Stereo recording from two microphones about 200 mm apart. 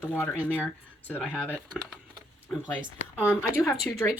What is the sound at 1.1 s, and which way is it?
Speech, centre (ahead or behind).